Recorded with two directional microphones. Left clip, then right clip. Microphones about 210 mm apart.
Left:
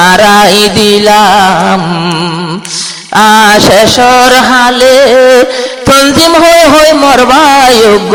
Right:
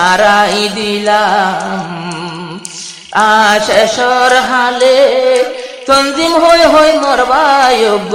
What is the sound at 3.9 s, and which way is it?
Music, 30° left (ahead or behind).